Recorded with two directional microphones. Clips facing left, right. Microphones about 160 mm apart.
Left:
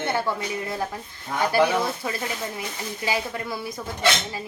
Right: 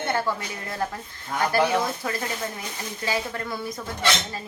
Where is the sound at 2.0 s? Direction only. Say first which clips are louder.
Even; 10° left (ahead or behind).